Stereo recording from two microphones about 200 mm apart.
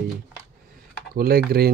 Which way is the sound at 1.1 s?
50° right (ahead or behind).